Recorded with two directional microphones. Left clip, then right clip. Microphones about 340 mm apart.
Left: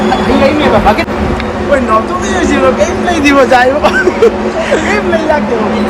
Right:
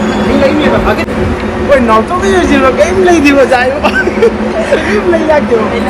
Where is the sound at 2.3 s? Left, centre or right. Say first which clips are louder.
Right 1 dB; centre.